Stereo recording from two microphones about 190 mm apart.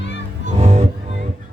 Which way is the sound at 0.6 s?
35° right (ahead or behind).